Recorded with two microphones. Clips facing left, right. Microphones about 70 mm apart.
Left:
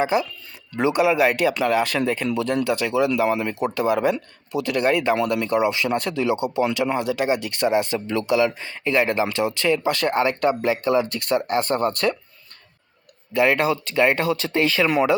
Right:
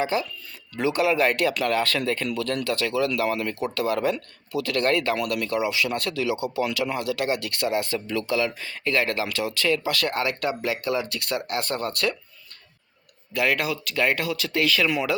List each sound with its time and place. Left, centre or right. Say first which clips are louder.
0.0 s speech: left 4 dB; centre; by 12.1 s left
13.3 s speech: left 5 dB; left